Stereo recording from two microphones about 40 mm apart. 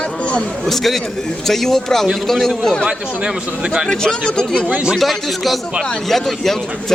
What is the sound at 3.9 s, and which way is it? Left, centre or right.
Speech, centre.